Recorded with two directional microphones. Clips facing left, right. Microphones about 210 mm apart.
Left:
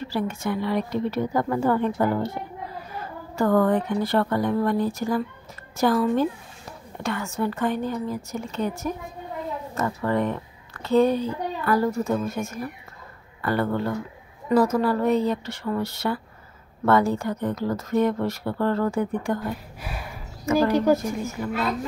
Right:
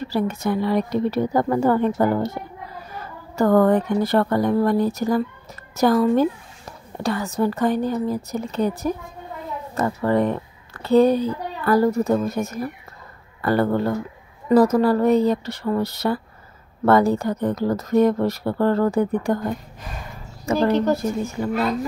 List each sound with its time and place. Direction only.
0.1 s a woman's voice: 40° right (ahead or behind)
3.3 s a woman's voice: 40° right (ahead or behind)
19.8 s speech: 10° left (ahead or behind)
21.0 s a woman's voice: 30° right (ahead or behind)